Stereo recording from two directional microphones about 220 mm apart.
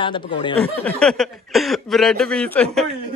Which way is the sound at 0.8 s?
5° left (ahead or behind).